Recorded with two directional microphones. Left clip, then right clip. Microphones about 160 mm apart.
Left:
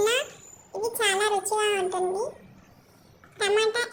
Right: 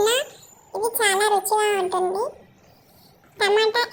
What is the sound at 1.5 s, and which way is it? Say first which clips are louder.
Child singing: right 4 dB; 25° right (ahead or behind).